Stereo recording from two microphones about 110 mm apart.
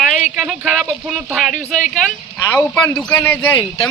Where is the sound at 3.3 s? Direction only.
20° left (ahead or behind).